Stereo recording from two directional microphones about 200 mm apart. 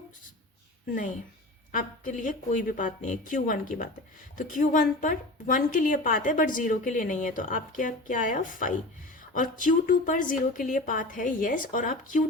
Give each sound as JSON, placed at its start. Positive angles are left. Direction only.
{"t": 1.7, "sound": "a woman's voice", "side_deg": 40}